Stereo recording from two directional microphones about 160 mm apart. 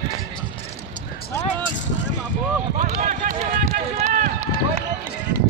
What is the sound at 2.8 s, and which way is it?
Run, 50° right (ahead or behind).